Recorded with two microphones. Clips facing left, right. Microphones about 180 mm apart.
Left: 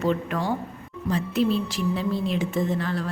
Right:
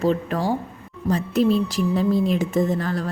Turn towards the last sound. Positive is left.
turn(degrees=-40)  # may be behind; listen again after turning